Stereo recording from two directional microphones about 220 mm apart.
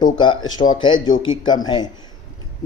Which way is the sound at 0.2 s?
20° left (ahead or behind).